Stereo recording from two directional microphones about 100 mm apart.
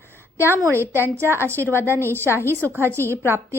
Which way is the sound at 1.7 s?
25° right (ahead or behind).